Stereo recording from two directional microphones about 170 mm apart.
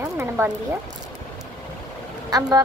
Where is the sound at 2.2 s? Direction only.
20° right (ahead or behind).